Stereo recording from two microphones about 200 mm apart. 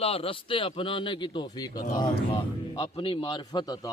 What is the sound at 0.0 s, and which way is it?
A man's voice, 30° left (ahead or behind).